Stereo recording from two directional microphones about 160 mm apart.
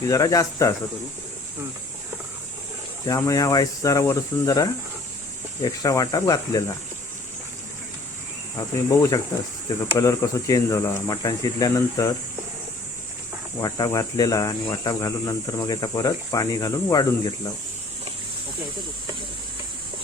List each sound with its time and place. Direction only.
0.1 s speech: 20° left (ahead or behind)
3.1 s speech: 20° left (ahead or behind)
8.5 s speech: 20° left (ahead or behind)
13.6 s speech: 25° left (ahead or behind)